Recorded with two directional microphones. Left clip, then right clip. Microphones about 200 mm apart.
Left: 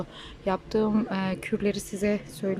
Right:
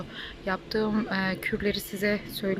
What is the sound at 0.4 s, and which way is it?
A woman's voice, 15° left (ahead or behind).